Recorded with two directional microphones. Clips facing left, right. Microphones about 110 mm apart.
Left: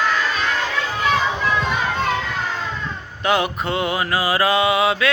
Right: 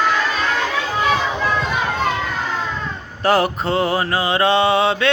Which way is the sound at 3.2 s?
40° right (ahead or behind).